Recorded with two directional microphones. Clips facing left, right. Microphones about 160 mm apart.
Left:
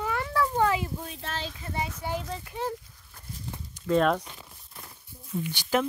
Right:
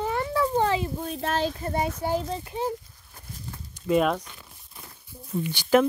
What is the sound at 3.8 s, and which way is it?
Speech, 10° right (ahead or behind).